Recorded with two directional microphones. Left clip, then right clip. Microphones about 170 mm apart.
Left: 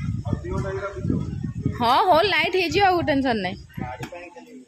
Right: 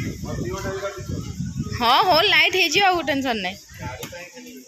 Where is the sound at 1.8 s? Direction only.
15° left (ahead or behind).